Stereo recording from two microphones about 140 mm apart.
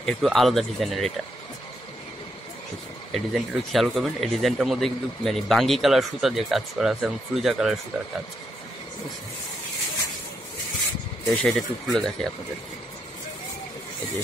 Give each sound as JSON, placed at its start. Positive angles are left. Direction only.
{"t": 0.0, "sound": "speech", "side_deg": 0}
{"t": 3.1, "sound": "speech", "side_deg": 0}
{"t": 11.2, "sound": "speech", "side_deg": 5}